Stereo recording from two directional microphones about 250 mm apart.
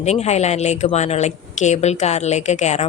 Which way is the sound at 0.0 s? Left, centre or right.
Left.